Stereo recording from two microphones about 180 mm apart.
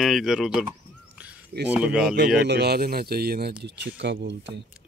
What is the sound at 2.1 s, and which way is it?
Speech, 65° right (ahead or behind).